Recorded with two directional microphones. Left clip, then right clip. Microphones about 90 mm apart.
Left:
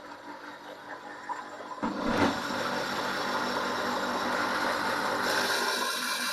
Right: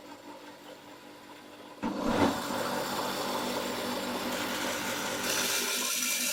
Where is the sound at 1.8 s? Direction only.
5° right (ahead or behind).